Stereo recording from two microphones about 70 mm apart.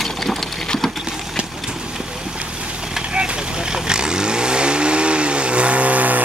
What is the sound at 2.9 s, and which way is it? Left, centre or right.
Vehicle, centre.